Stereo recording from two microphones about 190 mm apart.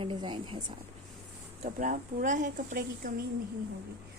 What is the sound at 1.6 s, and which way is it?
Speech, 40° right (ahead or behind).